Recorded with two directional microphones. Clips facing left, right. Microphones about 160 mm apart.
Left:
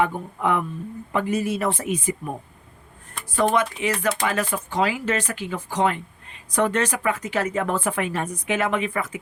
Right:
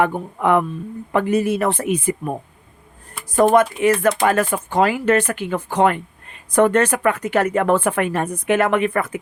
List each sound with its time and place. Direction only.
0.0 s speech: 60° right (ahead or behind)
3.2 s speech: 45° right (ahead or behind)